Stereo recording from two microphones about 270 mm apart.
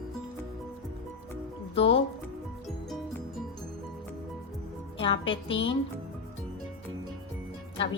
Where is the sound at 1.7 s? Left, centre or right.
Left.